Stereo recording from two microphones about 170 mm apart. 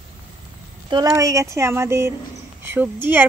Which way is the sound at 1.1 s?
20° right (ahead or behind).